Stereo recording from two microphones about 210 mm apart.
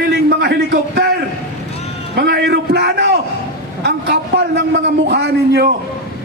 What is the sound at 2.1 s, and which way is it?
A man's voice, 55° right (ahead or behind).